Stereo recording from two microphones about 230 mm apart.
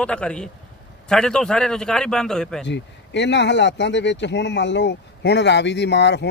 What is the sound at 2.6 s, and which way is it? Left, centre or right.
Speech, left.